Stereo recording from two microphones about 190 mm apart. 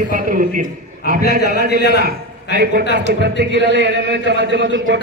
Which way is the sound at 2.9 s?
65° right (ahead or behind).